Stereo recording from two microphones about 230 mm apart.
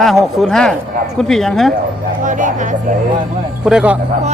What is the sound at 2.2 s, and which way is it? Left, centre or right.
Speech, right.